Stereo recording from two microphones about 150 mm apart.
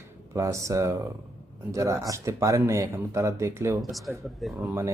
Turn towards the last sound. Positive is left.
turn(degrees=-20)  # may be behind; listen again after turning